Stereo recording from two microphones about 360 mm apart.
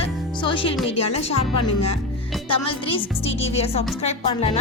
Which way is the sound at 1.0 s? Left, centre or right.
Left.